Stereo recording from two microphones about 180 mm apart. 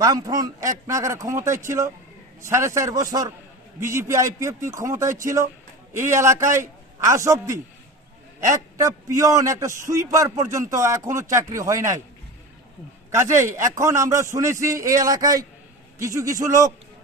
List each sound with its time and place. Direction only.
0.0 s a man's voice: 20° right (ahead or behind)
8.8 s a man's voice: 20° right (ahead or behind)
13.1 s a man's voice: 15° right (ahead or behind)